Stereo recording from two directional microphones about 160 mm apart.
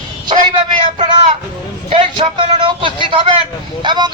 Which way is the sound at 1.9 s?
30° right (ahead or behind).